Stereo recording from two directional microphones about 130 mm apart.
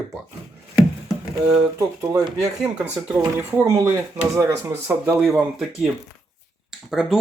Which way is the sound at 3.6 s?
25° right (ahead or behind).